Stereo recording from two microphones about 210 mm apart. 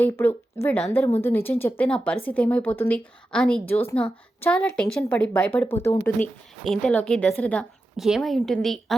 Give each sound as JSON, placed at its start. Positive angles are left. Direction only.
{"t": 0.0, "sound": "a woman's voice", "side_deg": 10}